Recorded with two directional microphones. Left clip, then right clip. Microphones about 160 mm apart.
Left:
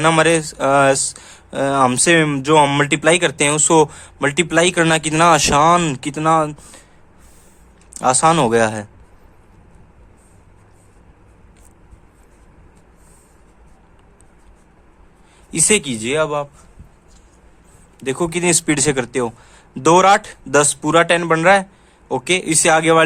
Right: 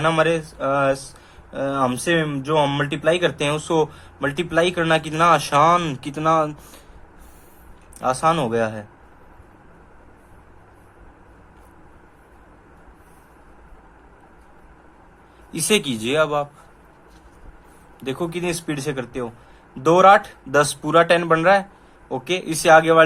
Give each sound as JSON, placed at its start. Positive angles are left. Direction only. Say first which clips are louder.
{"t": 0.0, "sound": "speech", "louder": "left 5 dB", "side_deg": 65}
{"t": 7.9, "sound": "speech", "louder": "left 5 dB", "side_deg": 55}
{"t": 15.5, "sound": "speech", "louder": "left 3 dB", "side_deg": 45}
{"t": 18.0, "sound": "speech", "louder": "left 6 dB", "side_deg": 45}
{"t": 19.7, "sound": "speech", "louder": "left 1 dB", "side_deg": 55}